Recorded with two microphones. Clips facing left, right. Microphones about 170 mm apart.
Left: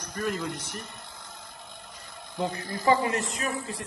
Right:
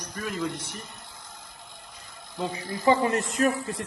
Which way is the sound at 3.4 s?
50° right (ahead or behind).